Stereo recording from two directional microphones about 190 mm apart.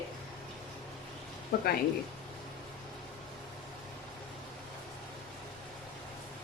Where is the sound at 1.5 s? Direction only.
60° left (ahead or behind).